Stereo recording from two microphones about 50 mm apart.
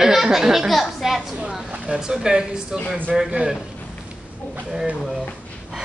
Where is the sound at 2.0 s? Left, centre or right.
Centre.